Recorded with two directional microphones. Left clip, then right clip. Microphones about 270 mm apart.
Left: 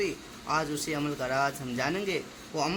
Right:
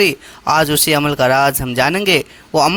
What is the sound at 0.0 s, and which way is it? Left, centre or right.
A man's voice, right.